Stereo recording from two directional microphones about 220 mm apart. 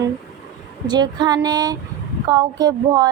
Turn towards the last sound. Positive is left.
turn(degrees=-15)  # may be behind; listen again after turning